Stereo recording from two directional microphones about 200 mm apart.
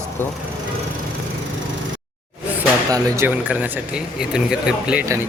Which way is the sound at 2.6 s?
10° right (ahead or behind).